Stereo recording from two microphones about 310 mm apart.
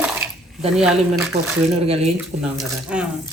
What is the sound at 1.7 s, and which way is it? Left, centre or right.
Speech, centre.